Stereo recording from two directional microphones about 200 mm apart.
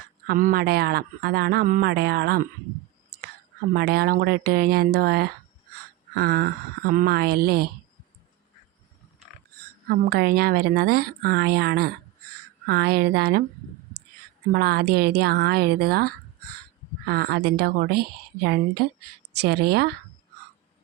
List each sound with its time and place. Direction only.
0.3 s speech: 45° right (ahead or behind)
3.8 s speech: 50° right (ahead or behind)
9.9 s speech: 50° right (ahead or behind)
14.5 s speech: 50° right (ahead or behind)
19.4 s speech: 55° right (ahead or behind)